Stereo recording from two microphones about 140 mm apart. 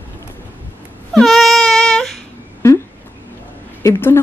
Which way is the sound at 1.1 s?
Centre (ahead or behind).